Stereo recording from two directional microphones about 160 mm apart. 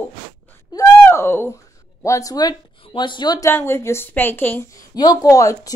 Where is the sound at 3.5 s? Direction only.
15° left (ahead or behind).